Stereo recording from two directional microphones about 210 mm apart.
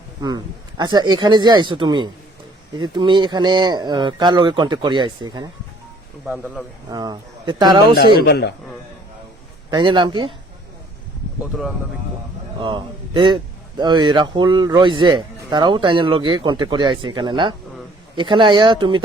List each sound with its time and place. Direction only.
0.2 s a man's voice: 20° right (ahead or behind)
6.2 s speech: 5° right (ahead or behind)
6.9 s a man's voice: 20° right (ahead or behind)
8.2 s a man's voice: 50° left (ahead or behind)
9.6 s a man's voice: 20° right (ahead or behind)
12.5 s a man's voice: 25° right (ahead or behind)